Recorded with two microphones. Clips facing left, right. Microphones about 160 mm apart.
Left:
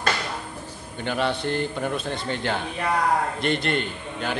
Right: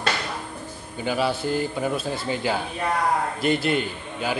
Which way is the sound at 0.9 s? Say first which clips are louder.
Right 1 dB; 5° right (ahead or behind).